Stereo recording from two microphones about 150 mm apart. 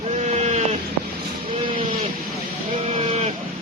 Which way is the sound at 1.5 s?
35° right (ahead or behind).